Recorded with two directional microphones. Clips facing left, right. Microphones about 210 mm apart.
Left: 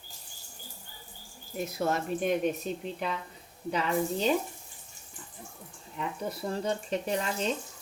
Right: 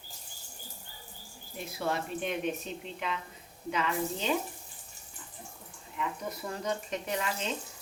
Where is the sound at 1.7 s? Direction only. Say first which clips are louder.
Left 3 dB; 40° left (ahead or behind).